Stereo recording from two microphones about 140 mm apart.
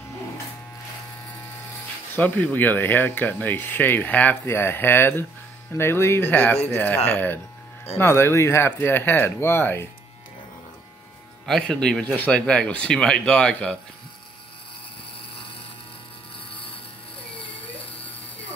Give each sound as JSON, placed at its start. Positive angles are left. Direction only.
{"t": 2.1, "sound": "speech", "side_deg": 10}
{"t": 11.4, "sound": "speech", "side_deg": 5}